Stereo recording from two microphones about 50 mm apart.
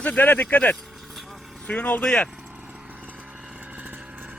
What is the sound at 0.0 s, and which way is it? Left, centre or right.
Speech, left.